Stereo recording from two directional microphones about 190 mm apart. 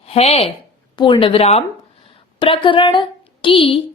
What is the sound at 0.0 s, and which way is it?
A woman's voice, 30° left (ahead or behind).